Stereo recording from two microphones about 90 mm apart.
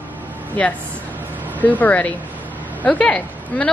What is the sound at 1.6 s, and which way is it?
A woman's voice, 20° left (ahead or behind).